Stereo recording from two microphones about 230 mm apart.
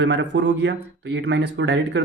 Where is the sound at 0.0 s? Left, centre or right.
Right.